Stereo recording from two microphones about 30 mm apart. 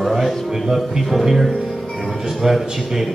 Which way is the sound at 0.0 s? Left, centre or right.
Centre.